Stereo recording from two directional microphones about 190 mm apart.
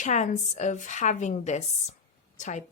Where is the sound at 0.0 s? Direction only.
40° left (ahead or behind).